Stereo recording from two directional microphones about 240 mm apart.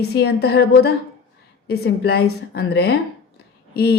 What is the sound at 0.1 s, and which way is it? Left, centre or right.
A woman's voice, left.